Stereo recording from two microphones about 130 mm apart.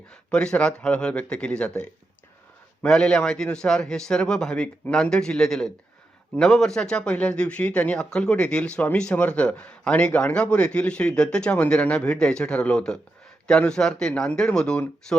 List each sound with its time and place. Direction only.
0.1 s a man's voice: 5° left (ahead or behind)